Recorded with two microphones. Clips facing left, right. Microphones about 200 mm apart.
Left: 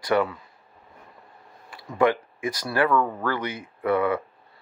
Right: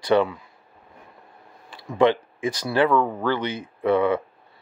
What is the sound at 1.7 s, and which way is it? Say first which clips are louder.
Speech: right 3 dB; 30° right (ahead or behind).